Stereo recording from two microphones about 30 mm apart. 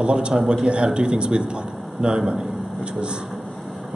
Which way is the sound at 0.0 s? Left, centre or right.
Right.